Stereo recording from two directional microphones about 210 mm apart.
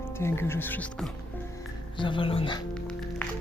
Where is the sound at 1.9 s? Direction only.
25° left (ahead or behind).